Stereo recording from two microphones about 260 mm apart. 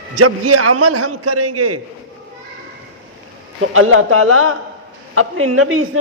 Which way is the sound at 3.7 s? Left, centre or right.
Right.